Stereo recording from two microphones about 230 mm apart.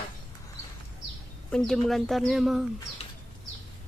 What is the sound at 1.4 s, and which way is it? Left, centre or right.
Speech, centre.